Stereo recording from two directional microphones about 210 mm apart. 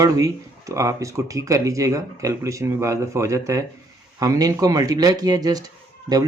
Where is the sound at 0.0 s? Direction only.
15° right (ahead or behind).